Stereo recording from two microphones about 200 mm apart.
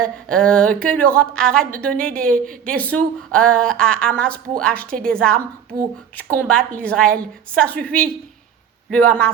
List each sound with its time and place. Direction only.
0.0 s a woman's voice: 5° left (ahead or behind)